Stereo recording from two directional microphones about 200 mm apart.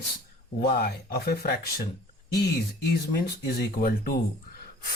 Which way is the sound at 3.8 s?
50° left (ahead or behind).